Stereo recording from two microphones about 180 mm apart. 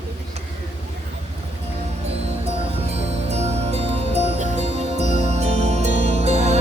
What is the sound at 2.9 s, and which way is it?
Music, 35° right (ahead or behind).